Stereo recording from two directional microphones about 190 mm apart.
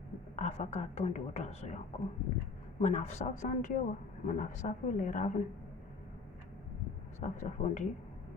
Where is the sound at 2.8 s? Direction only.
40° left (ahead or behind).